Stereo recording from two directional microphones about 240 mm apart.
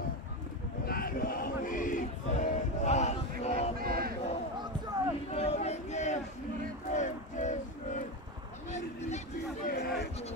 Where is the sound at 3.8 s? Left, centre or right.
Right.